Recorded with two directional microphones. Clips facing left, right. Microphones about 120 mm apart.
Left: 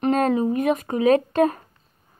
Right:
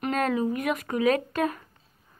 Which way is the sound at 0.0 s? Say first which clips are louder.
Left 6 dB; 30° left (ahead or behind).